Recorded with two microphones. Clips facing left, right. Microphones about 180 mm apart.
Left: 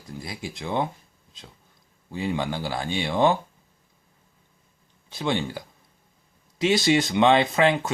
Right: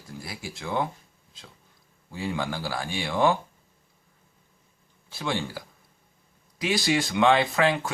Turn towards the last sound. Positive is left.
turn(degrees=20)  # may be behind; listen again after turning